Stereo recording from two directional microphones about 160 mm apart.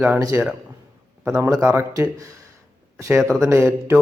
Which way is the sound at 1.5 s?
15° right (ahead or behind).